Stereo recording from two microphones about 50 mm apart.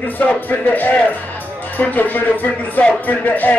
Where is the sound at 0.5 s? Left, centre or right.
Left.